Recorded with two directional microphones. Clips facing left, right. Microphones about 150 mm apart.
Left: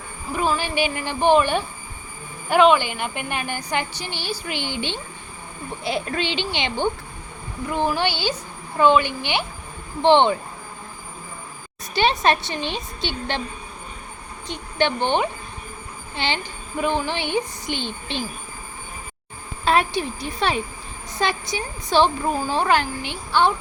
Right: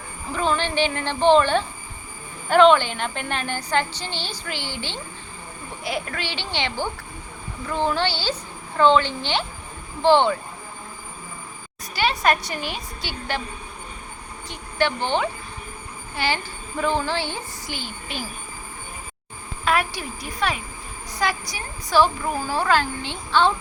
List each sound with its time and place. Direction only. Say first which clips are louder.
0.3 s speech: even; 10° left (ahead or behind)
11.9 s speech: left 2 dB; 25° left (ahead or behind)
14.4 s speech: left 1 dB; 20° left (ahead or behind)
19.6 s speech: left 3 dB; 25° left (ahead or behind)